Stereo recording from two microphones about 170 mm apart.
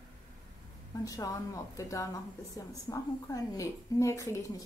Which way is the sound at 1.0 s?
20° left (ahead or behind).